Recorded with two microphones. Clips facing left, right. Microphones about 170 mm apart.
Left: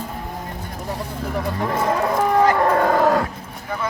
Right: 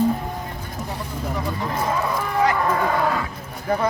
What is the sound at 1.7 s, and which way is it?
Livestock, 55° left (ahead or behind).